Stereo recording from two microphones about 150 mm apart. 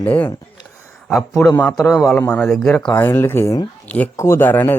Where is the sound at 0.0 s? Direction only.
10° left (ahead or behind).